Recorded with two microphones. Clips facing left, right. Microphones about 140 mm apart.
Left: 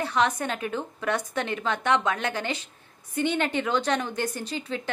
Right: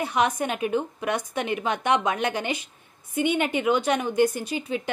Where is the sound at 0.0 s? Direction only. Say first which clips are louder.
Right 1 dB; 15° right (ahead or behind).